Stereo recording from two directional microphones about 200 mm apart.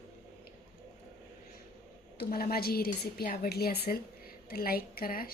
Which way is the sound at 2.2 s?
50° left (ahead or behind).